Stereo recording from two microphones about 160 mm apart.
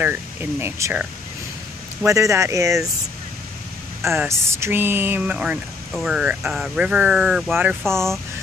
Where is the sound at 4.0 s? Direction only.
15° right (ahead or behind).